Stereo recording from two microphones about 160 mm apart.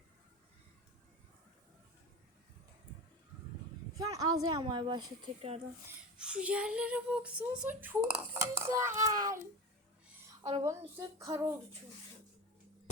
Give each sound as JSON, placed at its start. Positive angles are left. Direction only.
{"t": 3.9, "sound": "speech", "side_deg": -20}
{"t": 6.1, "sound": "a child's voice", "side_deg": -5}
{"t": 10.6, "sound": "speech", "side_deg": -20}